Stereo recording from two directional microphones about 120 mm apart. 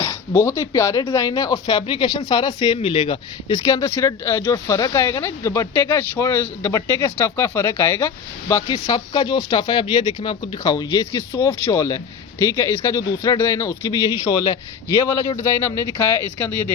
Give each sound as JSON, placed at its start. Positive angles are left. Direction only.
{"t": 0.0, "sound": "speech", "side_deg": 25}
{"t": 2.8, "sound": "speech", "side_deg": 50}
{"t": 3.6, "sound": "speech", "side_deg": 30}
{"t": 8.6, "sound": "speech", "side_deg": 40}